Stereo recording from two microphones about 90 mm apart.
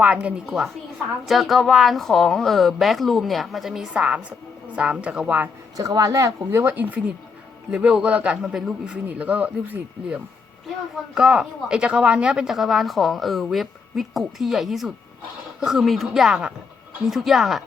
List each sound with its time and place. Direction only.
0.0 s a man's voice: 15° right (ahead or behind)
1.2 s speech: centre (ahead or behind); by 5.5 s 15° right (ahead or behind)
5.7 s a man's voice: 40° right (ahead or behind); by 10.2 s 20° right (ahead or behind)
11.1 s speech: 10° right (ahead or behind)